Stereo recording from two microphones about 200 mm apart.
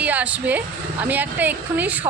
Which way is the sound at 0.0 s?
5° right (ahead or behind).